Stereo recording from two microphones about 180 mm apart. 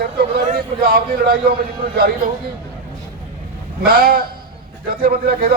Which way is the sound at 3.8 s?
55° right (ahead or behind).